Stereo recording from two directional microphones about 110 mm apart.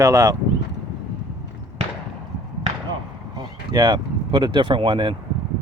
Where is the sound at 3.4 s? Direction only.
40° right (ahead or behind).